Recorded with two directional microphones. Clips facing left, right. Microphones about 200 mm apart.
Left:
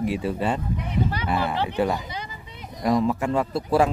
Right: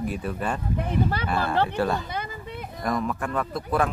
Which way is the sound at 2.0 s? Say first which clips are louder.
Right 3 dB; 55° right (ahead or behind).